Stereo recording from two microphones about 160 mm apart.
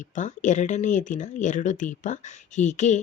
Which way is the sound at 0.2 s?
50° left (ahead or behind).